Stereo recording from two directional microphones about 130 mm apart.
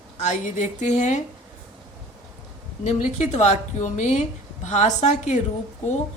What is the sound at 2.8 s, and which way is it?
A woman's voice, 65° left (ahead or behind).